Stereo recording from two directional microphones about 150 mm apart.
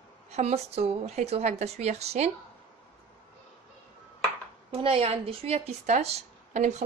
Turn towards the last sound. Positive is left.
turn(degrees=-50)  # may be behind; listen again after turning